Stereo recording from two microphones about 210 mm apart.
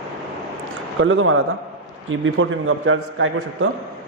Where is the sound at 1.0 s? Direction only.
65° right (ahead or behind).